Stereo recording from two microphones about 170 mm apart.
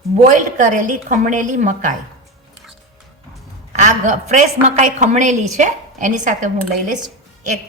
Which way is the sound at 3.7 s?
45° right (ahead or behind).